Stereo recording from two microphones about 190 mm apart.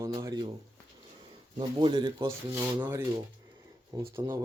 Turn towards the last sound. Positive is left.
turn(degrees=-15)  # may be behind; listen again after turning